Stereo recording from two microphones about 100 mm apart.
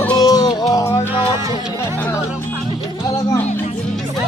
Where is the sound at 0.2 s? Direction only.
40° left (ahead or behind).